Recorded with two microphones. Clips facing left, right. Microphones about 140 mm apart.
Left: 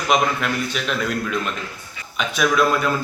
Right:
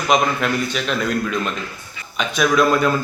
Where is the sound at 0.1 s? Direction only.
5° left (ahead or behind).